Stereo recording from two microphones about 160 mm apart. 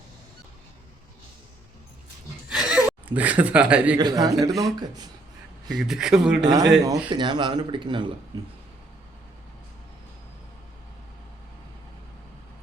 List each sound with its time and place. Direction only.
2.5 s gasp: 5° right (ahead or behind)
3.9 s speech: 25° right (ahead or behind)
5.6 s speech: centre (ahead or behind)
6.4 s speech: 25° right (ahead or behind)